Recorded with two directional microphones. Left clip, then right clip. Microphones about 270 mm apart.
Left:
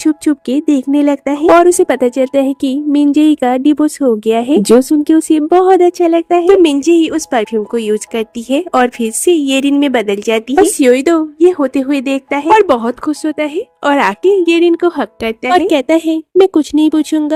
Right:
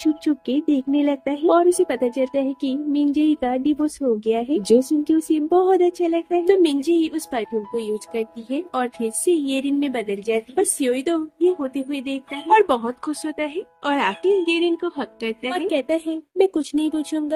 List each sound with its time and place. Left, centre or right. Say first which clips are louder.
0.0 s speech: left 8 dB; left